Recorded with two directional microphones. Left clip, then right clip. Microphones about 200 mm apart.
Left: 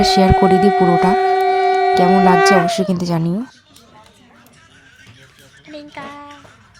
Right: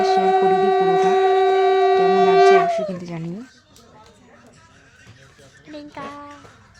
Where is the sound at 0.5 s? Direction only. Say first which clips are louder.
Left 4 dB; 10° right (ahead or behind).